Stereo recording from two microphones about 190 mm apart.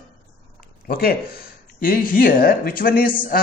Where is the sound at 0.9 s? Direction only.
50° left (ahead or behind).